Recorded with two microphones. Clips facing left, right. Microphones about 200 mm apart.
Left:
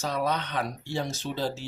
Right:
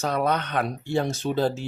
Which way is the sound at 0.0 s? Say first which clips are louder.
Right 4 dB; 55° right (ahead or behind).